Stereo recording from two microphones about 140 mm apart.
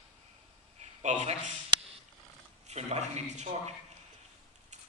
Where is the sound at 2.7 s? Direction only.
50° right (ahead or behind).